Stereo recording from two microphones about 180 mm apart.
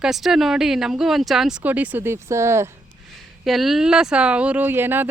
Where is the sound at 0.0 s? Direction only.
Centre (ahead or behind).